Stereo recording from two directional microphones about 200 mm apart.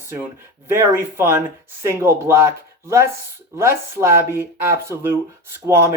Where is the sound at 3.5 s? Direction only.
15° right (ahead or behind).